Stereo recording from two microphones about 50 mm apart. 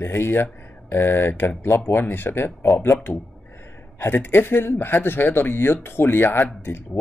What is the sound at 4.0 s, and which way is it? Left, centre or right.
Speech, left.